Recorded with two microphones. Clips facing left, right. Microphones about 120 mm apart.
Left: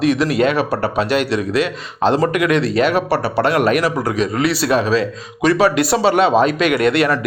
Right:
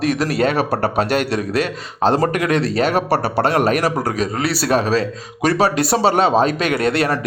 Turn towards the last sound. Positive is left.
turn(degrees=-35)  # may be behind; listen again after turning